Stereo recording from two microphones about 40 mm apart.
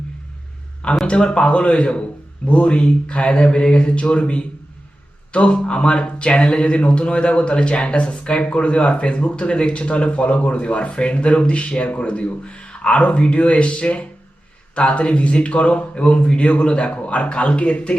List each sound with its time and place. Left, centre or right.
1.0 s speech: left